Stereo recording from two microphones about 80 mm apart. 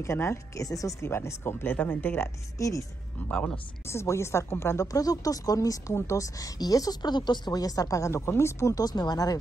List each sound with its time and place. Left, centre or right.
0.0 s a woman's voice: left
0.7 s a woman's voice: left
1.0 s speech: left
2.6 s a woman's voice: left
3.3 s speech: centre
3.8 s a woman's voice: left
8.8 s speech: left